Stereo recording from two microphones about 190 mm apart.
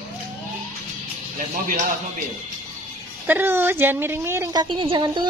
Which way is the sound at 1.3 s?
45° right (ahead or behind).